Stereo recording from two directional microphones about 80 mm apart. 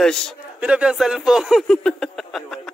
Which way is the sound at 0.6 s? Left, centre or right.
Centre.